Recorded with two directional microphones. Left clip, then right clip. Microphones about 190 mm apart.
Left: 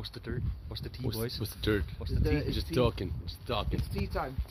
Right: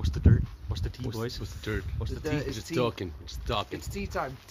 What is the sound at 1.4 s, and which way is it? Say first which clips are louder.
Speech: left 4 dB; 55° left (ahead or behind).